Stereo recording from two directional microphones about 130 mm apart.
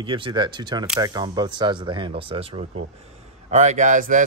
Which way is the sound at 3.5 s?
65° right (ahead or behind).